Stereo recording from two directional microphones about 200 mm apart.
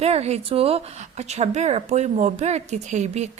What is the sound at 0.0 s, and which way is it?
A woman's voice, 30° right (ahead or behind).